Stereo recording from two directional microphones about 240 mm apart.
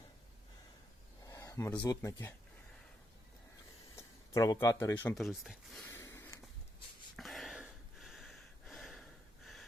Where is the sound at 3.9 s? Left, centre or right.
Centre.